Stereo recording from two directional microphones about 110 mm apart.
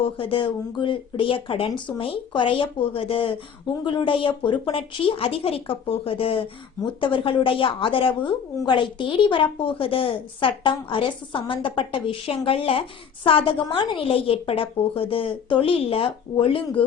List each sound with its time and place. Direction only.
0.0 s a woman's voice: 55° left (ahead or behind)